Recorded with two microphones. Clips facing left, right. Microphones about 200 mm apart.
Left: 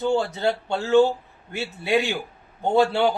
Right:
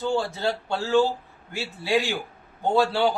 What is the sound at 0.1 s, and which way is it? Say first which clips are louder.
A man's voice: left 2 dB; 20° left (ahead or behind).